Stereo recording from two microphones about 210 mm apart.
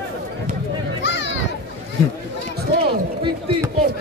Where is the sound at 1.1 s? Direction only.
55° left (ahead or behind).